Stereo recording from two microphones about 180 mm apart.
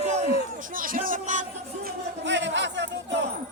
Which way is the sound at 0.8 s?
50° right (ahead or behind).